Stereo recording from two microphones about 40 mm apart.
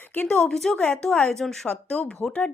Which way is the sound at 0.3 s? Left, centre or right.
Left.